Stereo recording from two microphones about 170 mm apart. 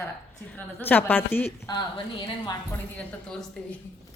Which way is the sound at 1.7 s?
30° left (ahead or behind).